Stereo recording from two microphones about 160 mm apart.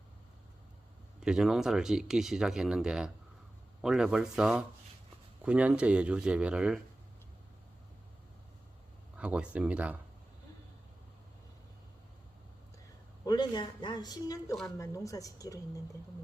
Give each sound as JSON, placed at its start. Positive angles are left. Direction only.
{"t": 1.2, "sound": "speech", "side_deg": -5}
{"t": 9.1, "sound": "speech", "side_deg": -5}
{"t": 13.2, "sound": "speech", "side_deg": 25}